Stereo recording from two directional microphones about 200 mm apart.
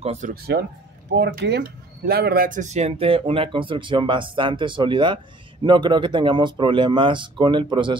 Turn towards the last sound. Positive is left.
turn(degrees=-25)  # may be behind; listen again after turning